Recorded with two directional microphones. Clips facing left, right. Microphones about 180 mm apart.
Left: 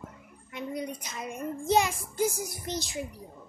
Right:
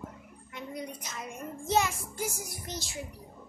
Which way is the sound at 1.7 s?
15° left (ahead or behind).